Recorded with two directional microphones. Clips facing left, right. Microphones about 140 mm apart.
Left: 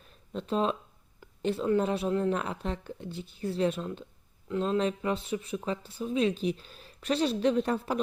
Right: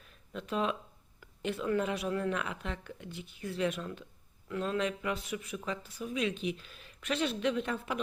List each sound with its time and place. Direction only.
0.3 s speech: 30° left (ahead or behind)